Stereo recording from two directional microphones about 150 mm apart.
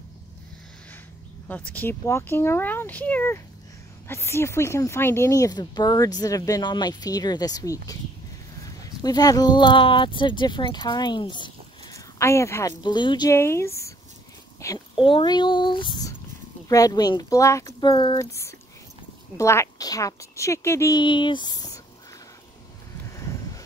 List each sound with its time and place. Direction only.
1.5 s speech: 10° left (ahead or behind)
12.8 s speech: 30° left (ahead or behind)
13.3 s speech: 15° left (ahead or behind)
14.6 s a sound: 20° left (ahead or behind)
15.0 s speech: 35° left (ahead or behind)
18.2 s speech: 20° left (ahead or behind)
21.0 s speech: 30° left (ahead or behind)
23.1 s a sound: 20° left (ahead or behind)